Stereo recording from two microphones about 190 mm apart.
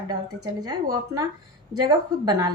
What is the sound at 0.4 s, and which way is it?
A woman's voice, 20° right (ahead or behind).